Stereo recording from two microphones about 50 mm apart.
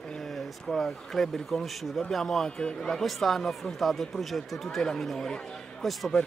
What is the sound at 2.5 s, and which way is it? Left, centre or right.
Speech, centre.